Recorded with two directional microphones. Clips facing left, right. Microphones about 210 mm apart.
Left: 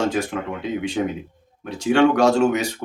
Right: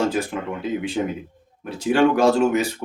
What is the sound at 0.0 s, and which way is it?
Speech, 5° right (ahead or behind).